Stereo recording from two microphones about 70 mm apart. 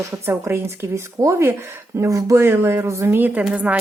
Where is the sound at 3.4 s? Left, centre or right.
Centre.